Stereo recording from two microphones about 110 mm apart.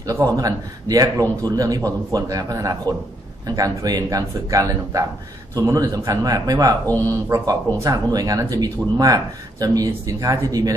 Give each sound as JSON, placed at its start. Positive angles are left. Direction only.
{"t": 0.0, "sound": "speech", "side_deg": -30}